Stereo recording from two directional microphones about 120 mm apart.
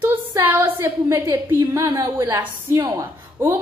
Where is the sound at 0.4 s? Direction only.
15° right (ahead or behind).